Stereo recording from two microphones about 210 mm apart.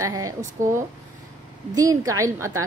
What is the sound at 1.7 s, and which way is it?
Speech, 15° right (ahead or behind).